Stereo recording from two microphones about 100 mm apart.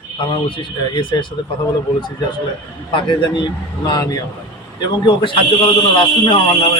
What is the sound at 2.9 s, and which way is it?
A man's voice, 50° left (ahead or behind).